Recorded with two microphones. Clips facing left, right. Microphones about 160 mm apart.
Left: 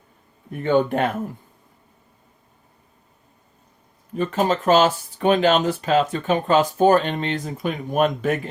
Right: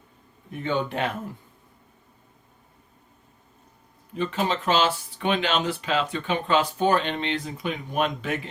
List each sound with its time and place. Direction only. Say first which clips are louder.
0.5 s speech: left 8 dB; 50° left (ahead or behind)
4.2 s speech: left 5 dB; 45° left (ahead or behind)